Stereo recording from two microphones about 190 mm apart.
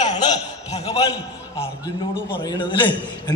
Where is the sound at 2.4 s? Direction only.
20° left (ahead or behind).